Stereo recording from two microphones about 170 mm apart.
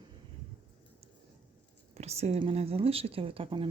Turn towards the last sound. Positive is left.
turn(degrees=-30)  # may be behind; listen again after turning